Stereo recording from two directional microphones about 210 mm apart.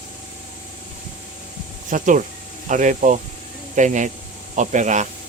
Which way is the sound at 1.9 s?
40° right (ahead or behind).